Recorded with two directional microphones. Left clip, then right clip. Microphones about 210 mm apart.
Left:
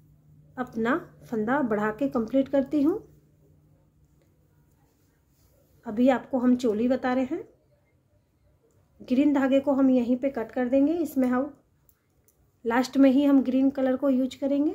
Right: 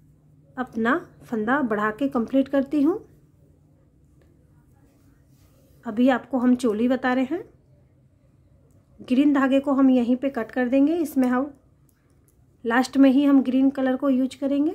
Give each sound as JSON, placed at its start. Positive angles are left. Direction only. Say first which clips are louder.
{"t": 0.6, "sound": "speech", "louder": "right 3 dB", "side_deg": -15}
{"t": 5.8, "sound": "a woman's voice", "louder": "right 2 dB", "side_deg": -20}
{"t": 9.0, "sound": "a woman's voice", "louder": "right 3 dB", "side_deg": -15}
{"t": 12.6, "sound": "speech", "louder": "right 3 dB", "side_deg": -15}